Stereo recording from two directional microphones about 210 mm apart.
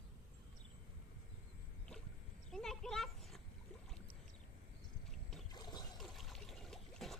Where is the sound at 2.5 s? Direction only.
Centre (ahead or behind).